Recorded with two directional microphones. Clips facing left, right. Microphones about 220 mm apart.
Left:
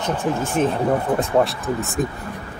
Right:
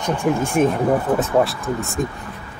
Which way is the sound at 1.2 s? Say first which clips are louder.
Right 1 dB; centre (ahead or behind).